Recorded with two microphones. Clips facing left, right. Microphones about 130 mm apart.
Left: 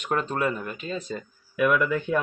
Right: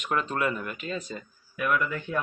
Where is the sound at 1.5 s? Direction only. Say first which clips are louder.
Left 5 dB; 90° left.